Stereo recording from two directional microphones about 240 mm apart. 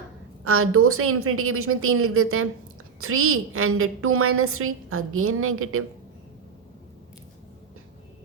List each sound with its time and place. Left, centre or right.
0.4 s a woman's voice: right